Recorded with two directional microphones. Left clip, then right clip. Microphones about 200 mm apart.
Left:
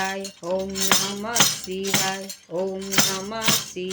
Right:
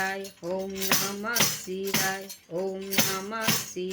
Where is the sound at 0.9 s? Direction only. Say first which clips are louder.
Left 4 dB; 15° left (ahead or behind).